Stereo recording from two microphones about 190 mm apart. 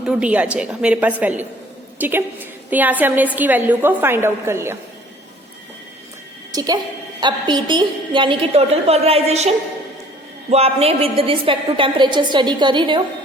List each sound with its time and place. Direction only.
0.0 s a woman's voice: 5° right (ahead or behind)
6.5 s a woman's voice: 20° right (ahead or behind); by 9.5 s 35° right (ahead or behind)
10.5 s a woman's voice: 30° right (ahead or behind)